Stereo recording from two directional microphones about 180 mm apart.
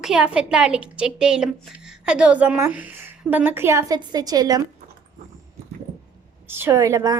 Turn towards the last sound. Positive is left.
turn(degrees=-20)  # may be behind; listen again after turning